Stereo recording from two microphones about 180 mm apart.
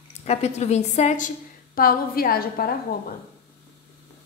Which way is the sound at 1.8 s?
55° left (ahead or behind).